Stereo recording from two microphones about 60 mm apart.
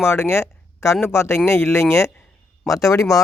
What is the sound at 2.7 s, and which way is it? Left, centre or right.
Speech, left.